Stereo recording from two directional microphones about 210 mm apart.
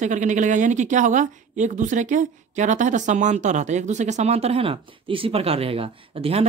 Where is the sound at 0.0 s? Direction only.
35° right (ahead or behind).